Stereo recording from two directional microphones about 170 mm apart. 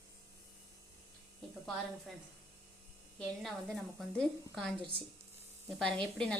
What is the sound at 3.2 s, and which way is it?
A woman's voice, 5° left (ahead or behind).